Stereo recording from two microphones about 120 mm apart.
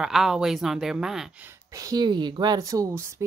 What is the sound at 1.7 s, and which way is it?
Speech, 30° right (ahead or behind).